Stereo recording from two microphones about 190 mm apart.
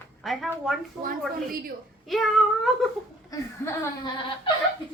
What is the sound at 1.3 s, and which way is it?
Speech, 50° right (ahead or behind).